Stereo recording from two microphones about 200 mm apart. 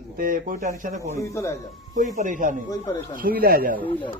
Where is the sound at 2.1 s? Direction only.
40° right (ahead or behind).